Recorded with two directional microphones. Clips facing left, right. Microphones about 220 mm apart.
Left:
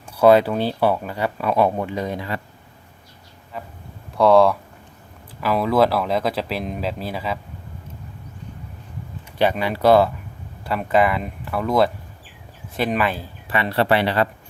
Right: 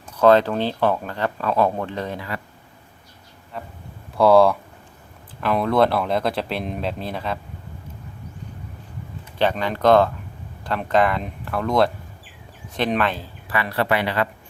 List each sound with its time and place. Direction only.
0.2 s speech: 10° left (ahead or behind)
3.5 s speech: centre (ahead or behind)
9.4 s speech: 10° left (ahead or behind)
13.5 s speech: 25° left (ahead or behind)